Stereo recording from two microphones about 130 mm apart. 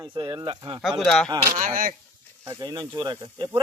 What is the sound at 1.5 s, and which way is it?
Speech, 90° right.